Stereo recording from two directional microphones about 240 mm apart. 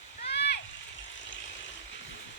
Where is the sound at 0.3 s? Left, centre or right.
Left.